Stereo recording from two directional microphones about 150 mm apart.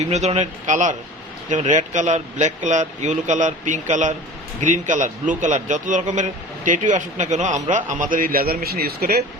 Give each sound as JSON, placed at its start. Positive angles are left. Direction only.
{"t": 0.0, "sound": "a man's voice", "side_deg": -50}